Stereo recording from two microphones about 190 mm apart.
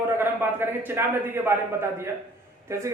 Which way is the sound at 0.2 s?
10° right (ahead or behind).